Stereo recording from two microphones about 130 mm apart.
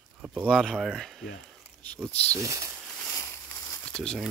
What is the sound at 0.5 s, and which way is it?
Speech, centre (ahead or behind).